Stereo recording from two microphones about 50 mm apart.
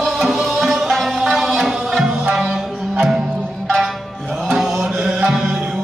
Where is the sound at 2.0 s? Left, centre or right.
Centre.